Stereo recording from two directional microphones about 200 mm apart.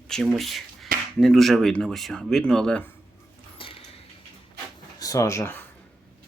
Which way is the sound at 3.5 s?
25° left (ahead or behind).